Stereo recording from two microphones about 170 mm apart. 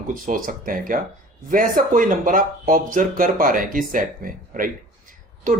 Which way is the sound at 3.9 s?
55° right (ahead or behind).